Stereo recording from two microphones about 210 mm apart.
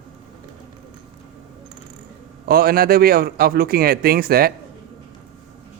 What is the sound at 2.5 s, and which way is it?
Speech, 45° right (ahead or behind).